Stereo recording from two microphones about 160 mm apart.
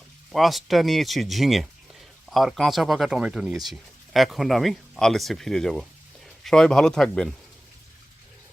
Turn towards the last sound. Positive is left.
turn(degrees=5)  # may be behind; listen again after turning